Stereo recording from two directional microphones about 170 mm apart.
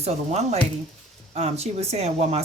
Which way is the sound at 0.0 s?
40° right (ahead or behind).